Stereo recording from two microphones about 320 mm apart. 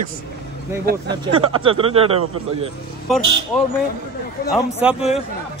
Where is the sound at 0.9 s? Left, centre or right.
Right.